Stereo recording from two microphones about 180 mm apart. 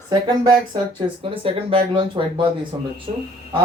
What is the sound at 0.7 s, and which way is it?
Speech, 30° right (ahead or behind).